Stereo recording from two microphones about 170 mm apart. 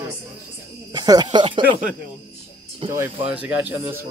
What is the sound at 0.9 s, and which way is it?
Speech, 25° right (ahead or behind).